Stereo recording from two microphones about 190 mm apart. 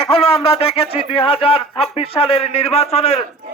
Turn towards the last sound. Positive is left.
turn(degrees=35)  # may be behind; listen again after turning